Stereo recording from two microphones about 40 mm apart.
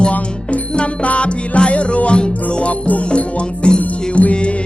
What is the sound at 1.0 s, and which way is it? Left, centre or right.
Music, left.